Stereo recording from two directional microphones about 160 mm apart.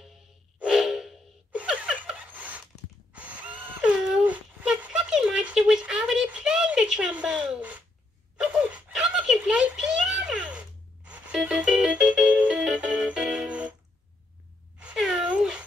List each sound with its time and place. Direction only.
0.0 s gasp: 5° right (ahead or behind)
3.1 s a sound: 10° right (ahead or behind)
11.1 s music: 5° right (ahead or behind)
14.8 s cat: 5° right (ahead or behind)